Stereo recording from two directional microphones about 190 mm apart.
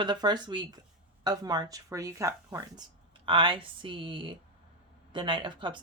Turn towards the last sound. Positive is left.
turn(degrees=-25)  # may be behind; listen again after turning